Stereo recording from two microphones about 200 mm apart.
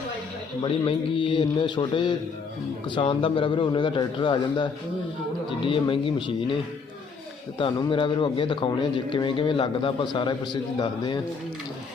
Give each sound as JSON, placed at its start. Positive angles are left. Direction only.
{"t": 0.6, "sound": "a man's voice", "side_deg": 25}
{"t": 7.6, "sound": "a man's voice", "side_deg": 25}